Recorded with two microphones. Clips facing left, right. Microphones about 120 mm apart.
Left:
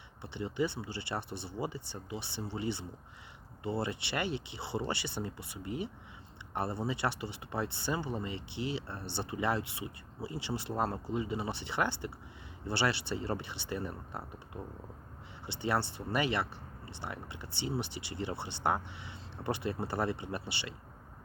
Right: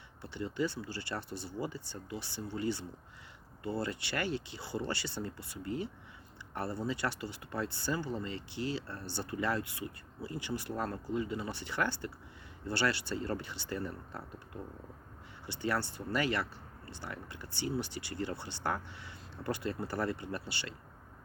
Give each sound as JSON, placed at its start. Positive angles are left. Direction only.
{"t": 0.2, "sound": "speech", "side_deg": 20}